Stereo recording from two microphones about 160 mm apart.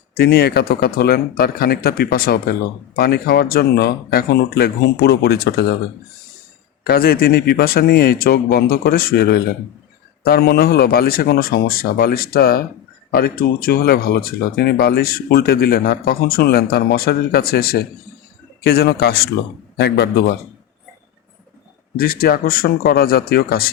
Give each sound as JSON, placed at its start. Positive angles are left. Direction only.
{"t": 0.1, "sound": "speech", "side_deg": 80}
{"t": 6.8, "sound": "a man's voice", "side_deg": 70}
{"t": 21.9, "sound": "speech", "side_deg": 70}